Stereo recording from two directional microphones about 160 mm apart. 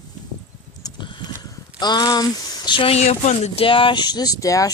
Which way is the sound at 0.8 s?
25° left (ahead or behind).